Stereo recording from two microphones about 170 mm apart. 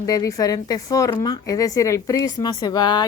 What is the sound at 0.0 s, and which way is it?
Speech, 20° left (ahead or behind).